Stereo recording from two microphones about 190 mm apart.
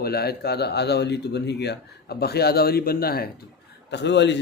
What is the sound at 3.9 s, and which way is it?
Speech, 65° left (ahead or behind).